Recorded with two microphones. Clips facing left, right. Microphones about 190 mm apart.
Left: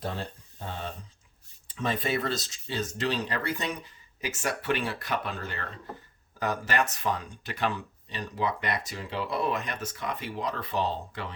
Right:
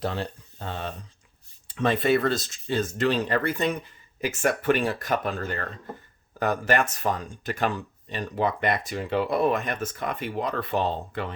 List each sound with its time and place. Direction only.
0.0 s speech: 80° right; by 11.3 s 55° right (ahead or behind)